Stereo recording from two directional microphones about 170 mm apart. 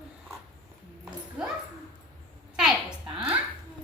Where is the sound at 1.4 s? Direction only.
5° right (ahead or behind).